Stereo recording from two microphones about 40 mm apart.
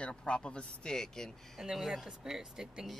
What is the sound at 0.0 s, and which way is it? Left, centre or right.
Speech, left.